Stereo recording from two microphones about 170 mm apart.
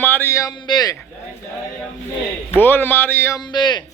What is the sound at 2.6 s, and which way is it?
Speech, 10° left (ahead or behind).